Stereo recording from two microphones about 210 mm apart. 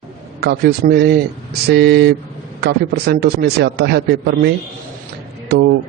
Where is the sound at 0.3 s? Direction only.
50° right (ahead or behind).